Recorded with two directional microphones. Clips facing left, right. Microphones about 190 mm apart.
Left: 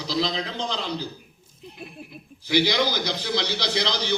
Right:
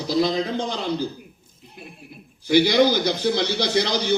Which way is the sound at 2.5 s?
50° right (ahead or behind).